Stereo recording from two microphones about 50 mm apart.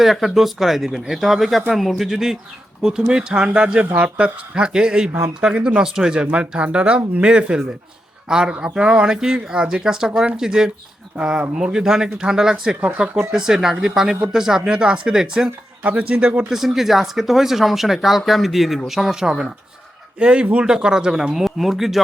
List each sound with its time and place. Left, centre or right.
0.0 s speech: centre
15.4 s speech: right
16.5 s speech: centre